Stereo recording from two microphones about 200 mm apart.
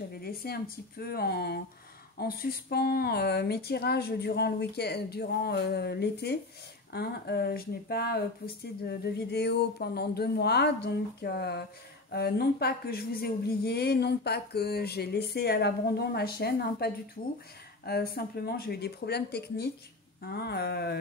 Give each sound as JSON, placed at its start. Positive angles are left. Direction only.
{"t": 0.2, "sound": "speech", "side_deg": 50}